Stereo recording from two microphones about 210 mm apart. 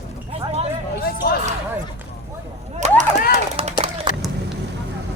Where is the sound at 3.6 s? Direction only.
30° right (ahead or behind).